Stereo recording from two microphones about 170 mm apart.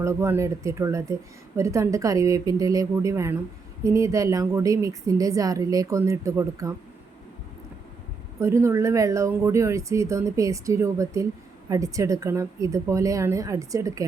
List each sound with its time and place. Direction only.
0.0 s a woman's voice: 15° right (ahead or behind)
8.4 s a woman's voice: 15° right (ahead or behind)